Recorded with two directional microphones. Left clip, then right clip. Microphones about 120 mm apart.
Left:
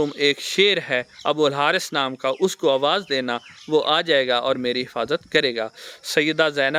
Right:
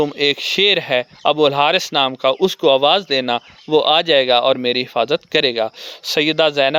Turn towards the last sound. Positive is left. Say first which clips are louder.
# right 5 dB
turn(degrees=-30)  # may be behind; listen again after turning